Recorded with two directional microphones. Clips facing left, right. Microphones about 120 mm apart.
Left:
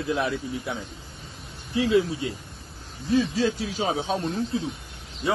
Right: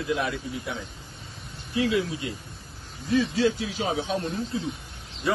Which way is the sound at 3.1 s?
40° left (ahead or behind).